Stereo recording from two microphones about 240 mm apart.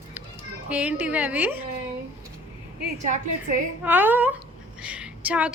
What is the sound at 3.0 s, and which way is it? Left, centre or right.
Speech, right.